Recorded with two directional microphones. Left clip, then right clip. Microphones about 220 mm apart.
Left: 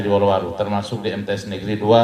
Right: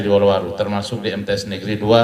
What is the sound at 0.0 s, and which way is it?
A man's voice, 50° right (ahead or behind).